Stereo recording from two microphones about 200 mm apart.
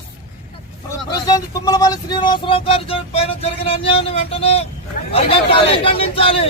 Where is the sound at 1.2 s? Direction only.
20° left (ahead or behind).